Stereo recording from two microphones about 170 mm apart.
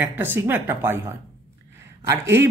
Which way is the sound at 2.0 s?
15° right (ahead or behind).